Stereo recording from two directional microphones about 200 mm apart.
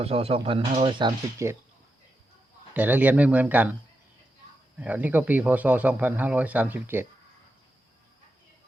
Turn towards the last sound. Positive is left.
turn(degrees=-10)  # may be behind; listen again after turning